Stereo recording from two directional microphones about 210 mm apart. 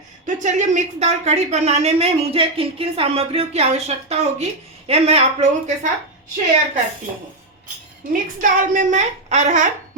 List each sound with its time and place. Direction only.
0.3 s a woman's voice: 35° right (ahead or behind)
8.1 s a woman's voice: 40° right (ahead or behind)